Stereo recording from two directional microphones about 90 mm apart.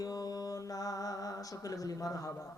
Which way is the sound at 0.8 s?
40° left (ahead or behind).